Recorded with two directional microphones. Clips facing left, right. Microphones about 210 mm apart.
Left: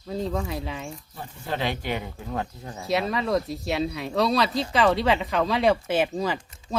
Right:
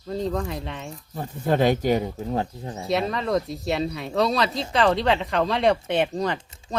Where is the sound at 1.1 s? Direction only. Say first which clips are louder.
Right 10 dB; 45° right (ahead or behind).